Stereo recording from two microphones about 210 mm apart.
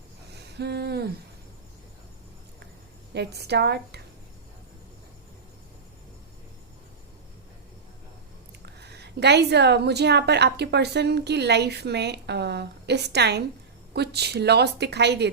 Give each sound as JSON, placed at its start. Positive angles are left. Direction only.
{"t": 0.3, "sound": "a sound", "side_deg": -50}
{"t": 3.2, "sound": "a woman's voice", "side_deg": -50}
{"t": 8.6, "sound": "a woman's voice", "side_deg": -50}